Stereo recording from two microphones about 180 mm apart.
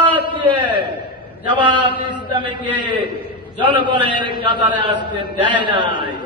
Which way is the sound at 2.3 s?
25° right (ahead or behind).